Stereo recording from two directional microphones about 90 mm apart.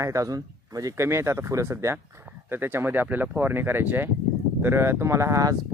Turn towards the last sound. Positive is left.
turn(degrees=-35)  # may be behind; listen again after turning